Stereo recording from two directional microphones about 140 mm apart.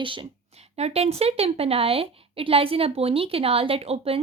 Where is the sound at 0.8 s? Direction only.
50° right (ahead or behind).